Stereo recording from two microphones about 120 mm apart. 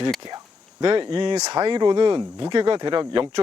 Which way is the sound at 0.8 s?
45° right (ahead or behind).